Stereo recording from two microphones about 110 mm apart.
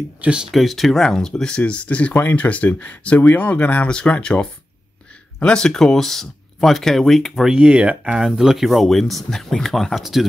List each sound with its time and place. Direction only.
0.2 s speech: 5° right (ahead or behind)
7.5 s speech: 10° right (ahead or behind)